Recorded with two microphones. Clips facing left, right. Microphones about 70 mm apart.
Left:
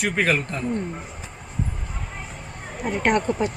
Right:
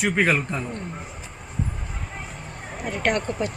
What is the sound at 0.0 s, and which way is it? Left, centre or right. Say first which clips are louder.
Speech: right 1 dB; centre.